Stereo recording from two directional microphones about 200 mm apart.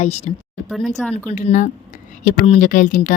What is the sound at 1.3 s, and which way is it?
A woman's voice, 40° left (ahead or behind).